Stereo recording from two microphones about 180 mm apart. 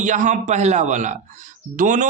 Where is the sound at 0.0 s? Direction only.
40° right (ahead or behind).